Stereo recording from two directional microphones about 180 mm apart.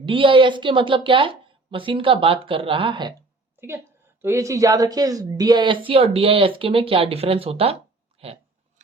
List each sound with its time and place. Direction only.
0.0 s speech: 30° right (ahead or behind)
3.6 s a woman's voice: 15° right (ahead or behind); by 8.3 s 30° right (ahead or behind)